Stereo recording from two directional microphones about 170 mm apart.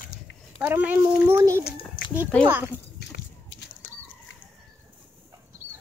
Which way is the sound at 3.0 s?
75° left (ahead or behind).